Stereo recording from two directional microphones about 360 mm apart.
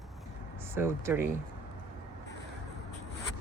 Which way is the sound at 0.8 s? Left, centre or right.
Centre.